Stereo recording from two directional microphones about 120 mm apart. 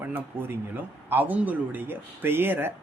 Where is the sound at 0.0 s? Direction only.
15° right (ahead or behind).